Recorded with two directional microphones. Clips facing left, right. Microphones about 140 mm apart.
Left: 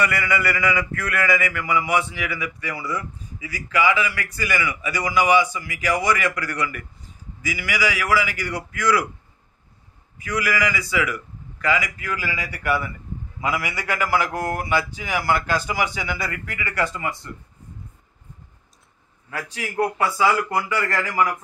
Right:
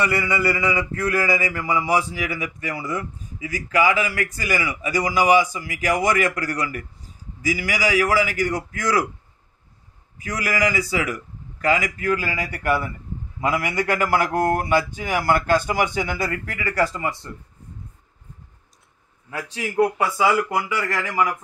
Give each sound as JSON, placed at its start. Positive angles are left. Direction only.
{"t": 0.0, "sound": "a man's voice", "side_deg": -30}
{"t": 10.1, "sound": "speech", "side_deg": -40}
{"t": 19.3, "sound": "speech", "side_deg": -20}